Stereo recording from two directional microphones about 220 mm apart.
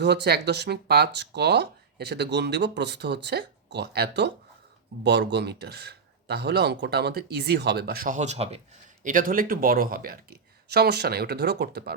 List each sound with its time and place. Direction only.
0.0 s speech: 50° right (ahead or behind); by 8.6 s 30° right (ahead or behind)
9.0 s speech: 40° right (ahead or behind)